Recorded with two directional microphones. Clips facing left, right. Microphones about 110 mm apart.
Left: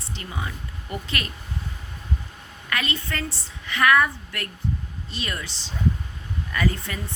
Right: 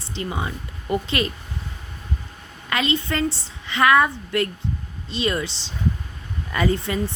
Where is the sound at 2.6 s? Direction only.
25° right (ahead or behind).